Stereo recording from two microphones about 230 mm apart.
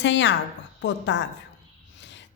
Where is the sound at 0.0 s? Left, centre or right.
Left.